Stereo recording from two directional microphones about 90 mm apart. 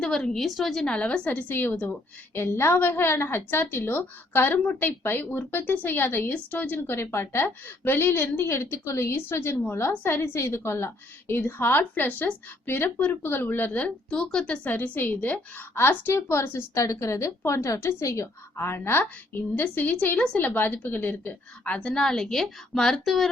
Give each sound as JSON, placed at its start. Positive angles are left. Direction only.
{"t": 0.0, "sound": "a woman's voice", "side_deg": 10}